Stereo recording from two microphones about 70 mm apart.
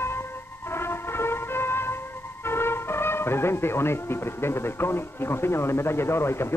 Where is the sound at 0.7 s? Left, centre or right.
Left.